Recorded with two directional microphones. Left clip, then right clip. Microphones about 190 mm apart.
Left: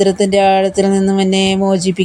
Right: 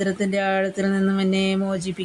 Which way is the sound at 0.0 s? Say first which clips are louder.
Left 12 dB; 25° left (ahead or behind).